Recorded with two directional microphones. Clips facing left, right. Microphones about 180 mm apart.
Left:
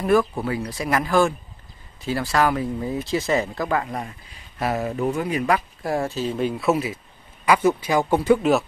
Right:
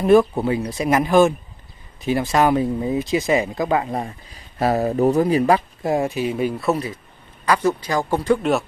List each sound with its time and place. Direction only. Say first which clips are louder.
0.0 s speech: right 5 dB; 20° right (ahead or behind)
4.6 s speech: right 6 dB; 35° right (ahead or behind)
5.8 s a man's voice: right 4 dB; 20° right (ahead or behind); by 8.6 s centre (ahead or behind)